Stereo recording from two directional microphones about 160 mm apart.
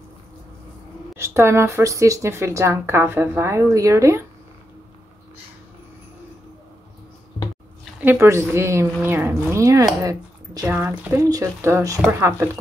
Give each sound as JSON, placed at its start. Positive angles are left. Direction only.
{"t": 1.1, "sound": "speech", "side_deg": -15}
{"t": 8.0, "sound": "speech", "side_deg": -15}